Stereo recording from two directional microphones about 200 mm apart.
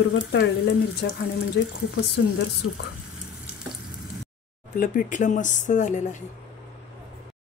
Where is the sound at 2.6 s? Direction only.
70° left (ahead or behind).